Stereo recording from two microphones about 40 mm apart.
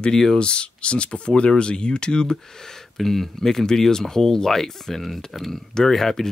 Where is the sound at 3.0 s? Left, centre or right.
Centre.